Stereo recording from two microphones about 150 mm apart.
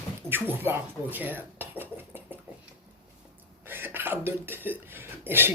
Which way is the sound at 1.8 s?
15° right (ahead or behind).